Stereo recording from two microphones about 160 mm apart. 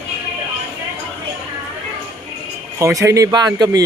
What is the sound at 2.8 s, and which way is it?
Speech, 20° right (ahead or behind).